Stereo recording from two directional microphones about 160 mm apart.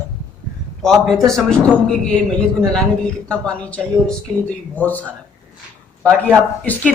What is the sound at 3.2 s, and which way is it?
Speech, 5° left (ahead or behind).